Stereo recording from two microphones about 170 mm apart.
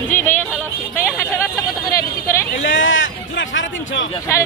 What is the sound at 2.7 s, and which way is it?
Speech, 90° left.